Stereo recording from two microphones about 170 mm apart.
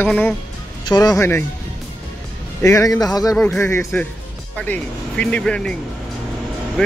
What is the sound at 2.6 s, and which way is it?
Speech, 20° left (ahead or behind).